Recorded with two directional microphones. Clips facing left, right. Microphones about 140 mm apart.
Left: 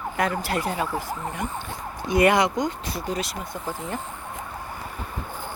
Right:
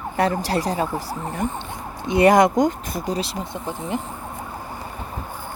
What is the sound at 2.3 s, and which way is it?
Speech, 45° right (ahead or behind).